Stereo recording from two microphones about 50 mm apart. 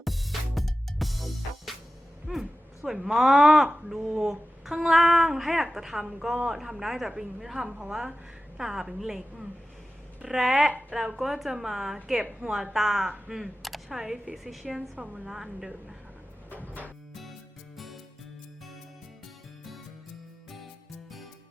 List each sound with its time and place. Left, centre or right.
0.0 s music: centre
2.3 s a sound: centre
2.8 s a woman's voice: centre
16.5 s music: right
17.7 s music: centre